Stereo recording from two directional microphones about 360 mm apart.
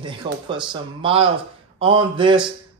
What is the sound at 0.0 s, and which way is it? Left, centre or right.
Speech, centre.